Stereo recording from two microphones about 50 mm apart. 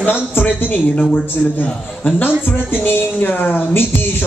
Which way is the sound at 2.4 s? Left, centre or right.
Left.